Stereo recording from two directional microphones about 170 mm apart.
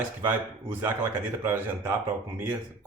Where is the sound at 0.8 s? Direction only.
15° right (ahead or behind).